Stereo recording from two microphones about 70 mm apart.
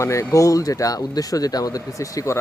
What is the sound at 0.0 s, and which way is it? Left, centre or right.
Speech, left.